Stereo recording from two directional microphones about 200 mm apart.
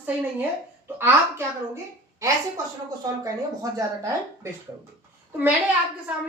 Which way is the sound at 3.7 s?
15° right (ahead or behind).